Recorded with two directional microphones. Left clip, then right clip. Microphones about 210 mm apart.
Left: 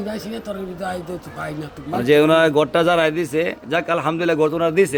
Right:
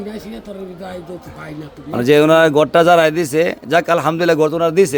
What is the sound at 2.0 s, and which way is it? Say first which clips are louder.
A man's voice: right 4 dB; 30° right (ahead or behind).